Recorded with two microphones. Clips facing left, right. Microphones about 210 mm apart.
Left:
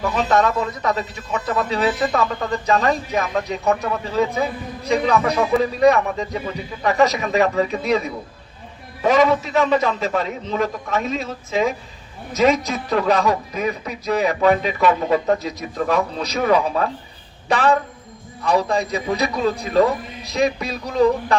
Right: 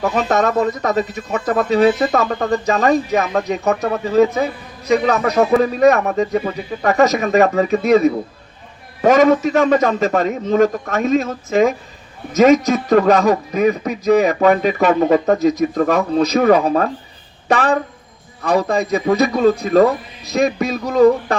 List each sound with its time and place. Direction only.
0.0 s a man's voice: 50° right (ahead or behind)